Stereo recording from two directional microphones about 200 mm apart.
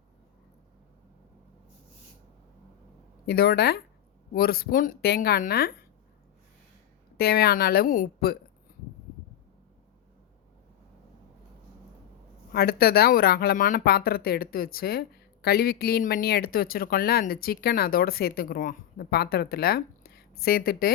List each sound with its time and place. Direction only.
3.2 s speech: 50° left (ahead or behind)
7.2 s speech: 50° left (ahead or behind)
12.5 s speech: 50° left (ahead or behind)